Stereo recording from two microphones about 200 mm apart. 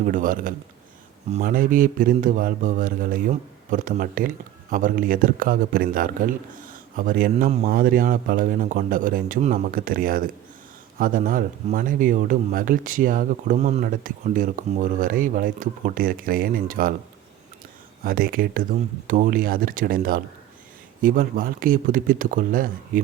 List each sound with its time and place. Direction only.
0.0 s speech: 45° right (ahead or behind)
18.0 s speech: 45° right (ahead or behind)